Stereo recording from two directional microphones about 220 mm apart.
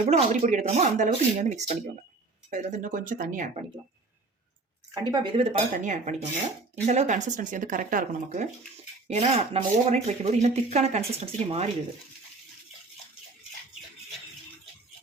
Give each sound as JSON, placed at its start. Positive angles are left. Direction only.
{"t": 0.0, "sound": "speech", "side_deg": -30}
{"t": 5.0, "sound": "speech", "side_deg": -20}